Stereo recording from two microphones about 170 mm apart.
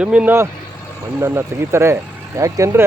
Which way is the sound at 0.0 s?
5° right (ahead or behind).